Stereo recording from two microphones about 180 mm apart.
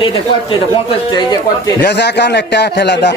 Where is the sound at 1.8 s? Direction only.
70° left (ahead or behind).